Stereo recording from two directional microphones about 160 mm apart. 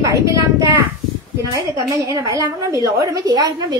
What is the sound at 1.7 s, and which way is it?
A woman's voice, 20° right (ahead or behind).